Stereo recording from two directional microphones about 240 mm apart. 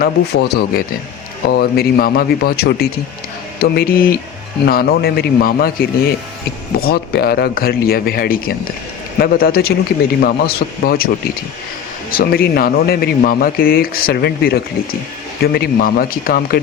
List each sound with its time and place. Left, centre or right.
0.0 s speech: left
12.1 s speech: left